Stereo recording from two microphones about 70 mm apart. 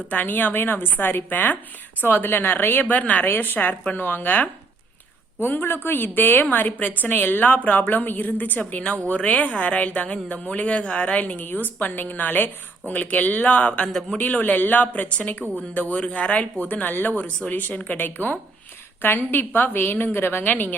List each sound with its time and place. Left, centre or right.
0.1 s a woman's voice: left